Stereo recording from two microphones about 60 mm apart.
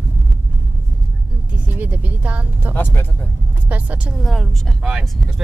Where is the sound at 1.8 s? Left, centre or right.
Right.